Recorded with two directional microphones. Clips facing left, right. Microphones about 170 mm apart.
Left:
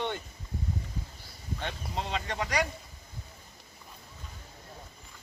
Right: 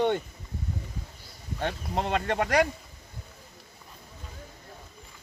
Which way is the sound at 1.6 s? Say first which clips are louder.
Right 7 dB; 55° right (ahead or behind).